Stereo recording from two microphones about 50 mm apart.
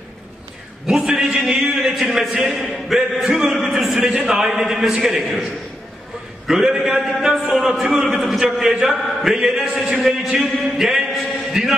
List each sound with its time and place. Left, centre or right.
0.8 s a man's voice: centre
2.3 s a man's voice: right
2.6 s a man's voice: centre
6.4 s a man's voice: centre